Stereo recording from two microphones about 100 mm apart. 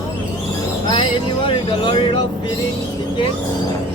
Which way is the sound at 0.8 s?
55° left (ahead or behind).